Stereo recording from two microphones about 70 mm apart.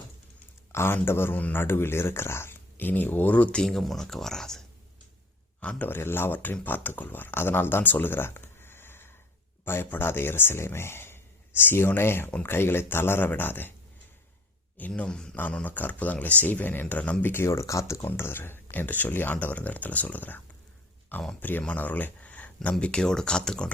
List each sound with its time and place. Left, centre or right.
0.7 s a man's voice: left; by 3.6 s centre
3.6 s speech: centre
5.5 s a man's voice: left
5.9 s speech: left
14.8 s speech: centre
15.6 s speech: left
17.4 s speech: left
18.0 s speech: left; by 23.6 s centre